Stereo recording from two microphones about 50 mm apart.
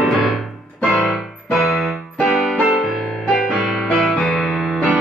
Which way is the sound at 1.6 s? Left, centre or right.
Centre.